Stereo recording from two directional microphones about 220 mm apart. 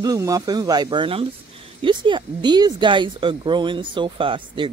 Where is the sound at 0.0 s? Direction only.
15° right (ahead or behind).